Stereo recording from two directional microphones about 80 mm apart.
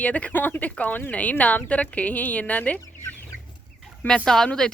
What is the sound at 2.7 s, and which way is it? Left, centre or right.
Chicken, left.